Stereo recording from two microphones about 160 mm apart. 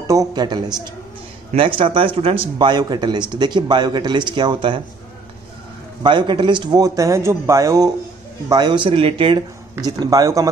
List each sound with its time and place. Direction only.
0.0 s speech: 20° right (ahead or behind)
6.0 s speech: 30° right (ahead or behind)